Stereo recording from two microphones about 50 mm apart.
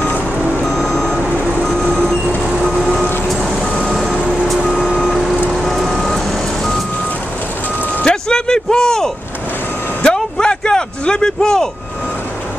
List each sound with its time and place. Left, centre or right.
0.7 s reversing beeps: centre
1.6 s vehicle: centre
2.9 s vehicle: centre
4.1 s vehicle: right
4.7 s vehicle: centre
8.0 s a sound: centre